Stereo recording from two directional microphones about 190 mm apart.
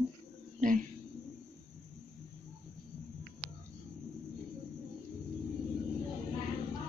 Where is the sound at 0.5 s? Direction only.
45° right (ahead or behind).